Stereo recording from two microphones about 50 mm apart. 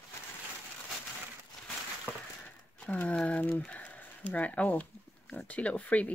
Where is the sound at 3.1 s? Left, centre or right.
Left.